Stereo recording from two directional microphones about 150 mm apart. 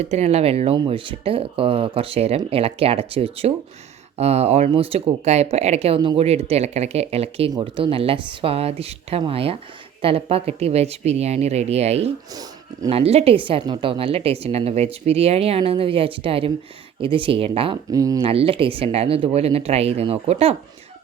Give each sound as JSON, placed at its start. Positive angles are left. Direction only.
{"t": 0.0, "sound": "a woman's voice", "side_deg": -45}
{"t": 12.3, "sound": "speech", "side_deg": -25}
{"t": 12.9, "sound": "a woman's voice", "side_deg": -45}
{"t": 17.9, "sound": "speech", "side_deg": -25}
{"t": 18.3, "sound": "a woman's voice", "side_deg": -40}